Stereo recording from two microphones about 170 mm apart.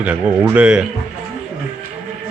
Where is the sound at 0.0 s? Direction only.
10° right (ahead or behind).